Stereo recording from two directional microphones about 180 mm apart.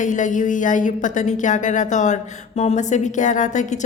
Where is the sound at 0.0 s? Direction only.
45° left (ahead or behind).